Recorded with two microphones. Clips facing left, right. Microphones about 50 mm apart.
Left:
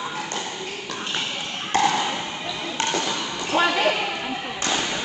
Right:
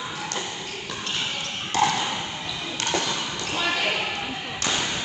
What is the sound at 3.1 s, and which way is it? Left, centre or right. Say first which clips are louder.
Basketball bounce: left 3 dB; left.